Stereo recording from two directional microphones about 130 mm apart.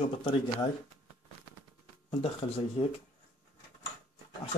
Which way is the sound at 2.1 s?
45° left (ahead or behind).